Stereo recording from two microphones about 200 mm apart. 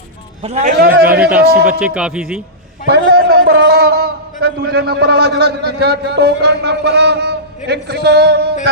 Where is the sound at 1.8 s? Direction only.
5° right (ahead or behind).